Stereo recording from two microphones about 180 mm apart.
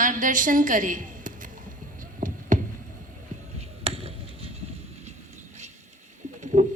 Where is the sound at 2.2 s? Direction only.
50° right (ahead or behind).